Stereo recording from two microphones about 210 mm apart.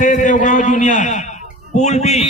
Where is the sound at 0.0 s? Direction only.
35° left (ahead or behind).